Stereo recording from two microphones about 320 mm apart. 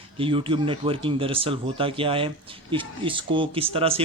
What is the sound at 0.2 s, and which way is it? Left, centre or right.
Speech, centre.